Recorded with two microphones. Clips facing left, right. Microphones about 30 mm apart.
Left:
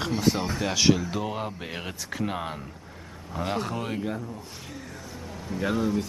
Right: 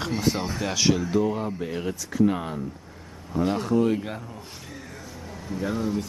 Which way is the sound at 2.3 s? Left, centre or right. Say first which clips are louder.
Right 2 dB; centre.